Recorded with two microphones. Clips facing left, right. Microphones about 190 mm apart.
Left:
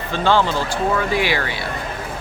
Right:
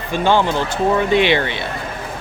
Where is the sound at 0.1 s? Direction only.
15° right (ahead or behind).